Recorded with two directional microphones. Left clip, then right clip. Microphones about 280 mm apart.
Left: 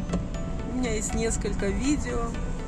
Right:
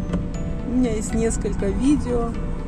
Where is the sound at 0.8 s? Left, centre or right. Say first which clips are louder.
Right 5 dB; centre.